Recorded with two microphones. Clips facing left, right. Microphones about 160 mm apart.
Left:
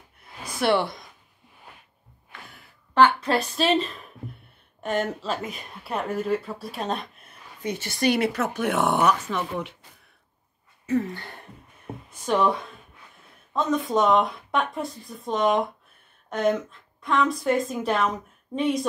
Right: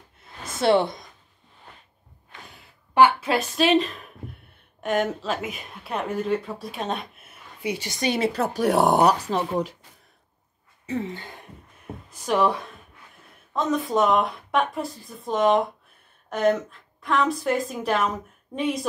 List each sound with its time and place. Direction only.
0.5 s speech: 25° right (ahead or behind)
2.4 s a sound: 15° right (ahead or behind)
4.8 s a woman's voice: centre (ahead or behind)
8.1 s speech: 30° right (ahead or behind)
10.9 s a sound: 25° right (ahead or behind)
12.3 s a woman's voice: centre (ahead or behind)